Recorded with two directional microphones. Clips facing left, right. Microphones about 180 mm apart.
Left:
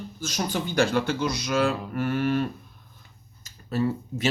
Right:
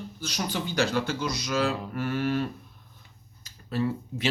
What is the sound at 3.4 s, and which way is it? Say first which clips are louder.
Speech: left 2 dB; 45° left (ahead or behind).